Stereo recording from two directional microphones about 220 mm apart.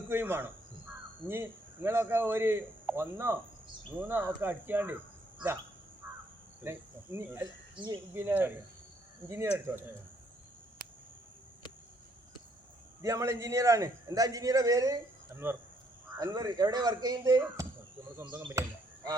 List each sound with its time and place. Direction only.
0.1 s speech: 10° right (ahead or behind)
6.6 s cricket: 10° right (ahead or behind)
7.8 s speech: 15° right (ahead or behind)
13.0 s speech: 15° right (ahead or behind)